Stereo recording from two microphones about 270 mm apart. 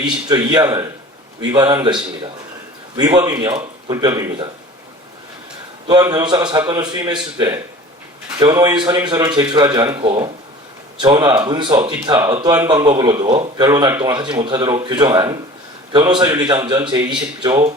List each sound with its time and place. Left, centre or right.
0.0 s speech: centre
5.9 s speech: centre